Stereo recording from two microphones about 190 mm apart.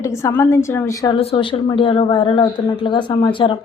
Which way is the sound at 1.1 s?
30° left (ahead or behind).